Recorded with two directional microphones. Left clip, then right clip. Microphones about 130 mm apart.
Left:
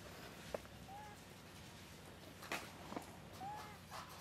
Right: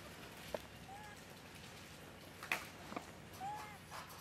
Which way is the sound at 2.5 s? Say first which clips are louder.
Right 4 dB; 30° right (ahead or behind).